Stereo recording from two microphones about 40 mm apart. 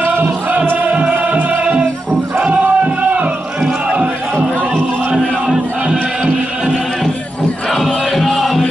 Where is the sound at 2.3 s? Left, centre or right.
Right.